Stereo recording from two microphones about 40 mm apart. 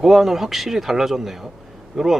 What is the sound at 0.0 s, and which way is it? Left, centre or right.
Speech, centre.